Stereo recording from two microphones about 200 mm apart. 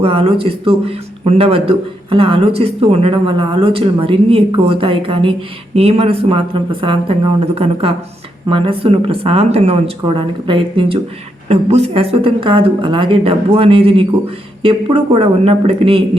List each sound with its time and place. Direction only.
0.0 s a man's voice: 30° right (ahead or behind)